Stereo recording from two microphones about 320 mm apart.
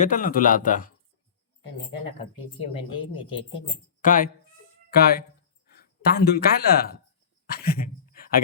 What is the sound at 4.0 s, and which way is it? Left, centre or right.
Speech, left.